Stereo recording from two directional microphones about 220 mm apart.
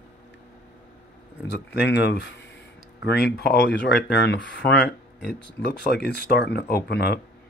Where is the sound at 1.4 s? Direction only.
50° left (ahead or behind).